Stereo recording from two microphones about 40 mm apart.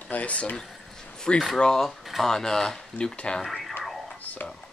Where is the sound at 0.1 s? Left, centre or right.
Left.